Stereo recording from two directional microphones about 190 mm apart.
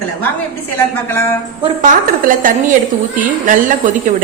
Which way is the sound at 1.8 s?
45° right (ahead or behind).